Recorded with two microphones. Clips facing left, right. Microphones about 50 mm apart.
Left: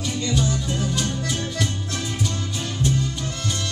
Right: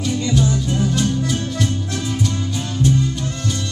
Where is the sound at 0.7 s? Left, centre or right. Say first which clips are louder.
Right 5 dB; centre.